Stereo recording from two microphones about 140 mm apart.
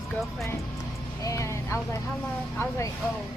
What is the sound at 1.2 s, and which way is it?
Speech, 20° left (ahead or behind).